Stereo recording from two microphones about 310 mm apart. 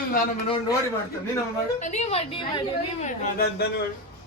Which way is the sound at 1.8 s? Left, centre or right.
Left.